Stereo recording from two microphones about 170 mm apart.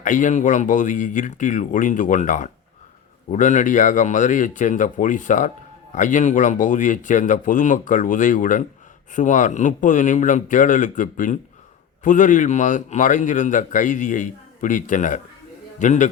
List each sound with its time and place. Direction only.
0.0 s a man's voice: 50° left (ahead or behind)